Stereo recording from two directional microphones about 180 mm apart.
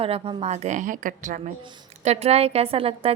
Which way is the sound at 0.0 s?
30° right (ahead or behind).